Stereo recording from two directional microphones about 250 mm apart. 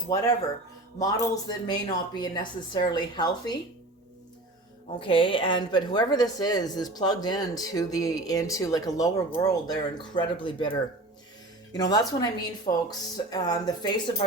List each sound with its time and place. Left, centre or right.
0.9 s a woman's voice: centre
4.9 s a woman's voice: left